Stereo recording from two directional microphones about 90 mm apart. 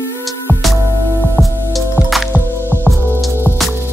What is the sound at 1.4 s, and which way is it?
Music, 15° left (ahead or behind).